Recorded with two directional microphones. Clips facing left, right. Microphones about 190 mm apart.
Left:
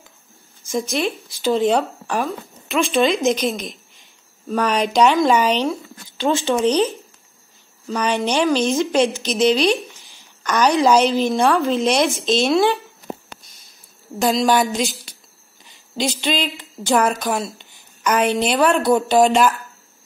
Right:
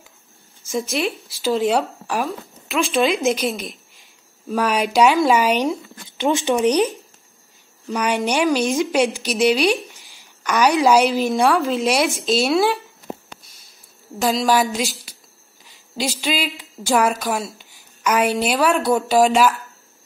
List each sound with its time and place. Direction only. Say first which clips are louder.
0.7 s a woman's voice: left 1 dB; 5° right (ahead or behind)
14.1 s a woman's voice: left 1 dB; 5° right (ahead or behind)